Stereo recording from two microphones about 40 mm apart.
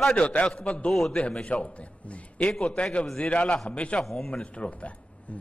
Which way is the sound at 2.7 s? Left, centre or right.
Left.